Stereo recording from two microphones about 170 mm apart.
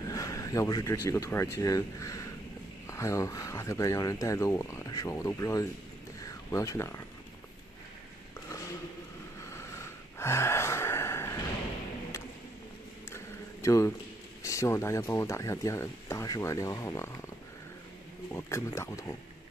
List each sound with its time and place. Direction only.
0.0 s speech: 20° left (ahead or behind)
9.5 s gasp: 15° left (ahead or behind)
13.1 s a sound: 15° left (ahead or behind)
14.4 s speech: 15° left (ahead or behind)
18.3 s speech: 15° left (ahead or behind)